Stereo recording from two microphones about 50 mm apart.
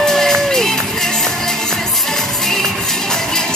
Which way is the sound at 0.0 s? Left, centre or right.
Centre.